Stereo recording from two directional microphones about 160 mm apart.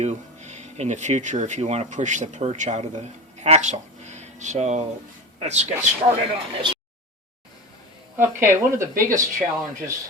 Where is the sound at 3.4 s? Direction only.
45° right (ahead or behind).